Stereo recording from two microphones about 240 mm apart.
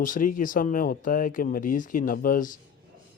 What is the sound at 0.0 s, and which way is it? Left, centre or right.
Speech, left.